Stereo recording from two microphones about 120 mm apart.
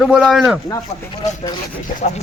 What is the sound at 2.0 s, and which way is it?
Speech, 75° left (ahead or behind).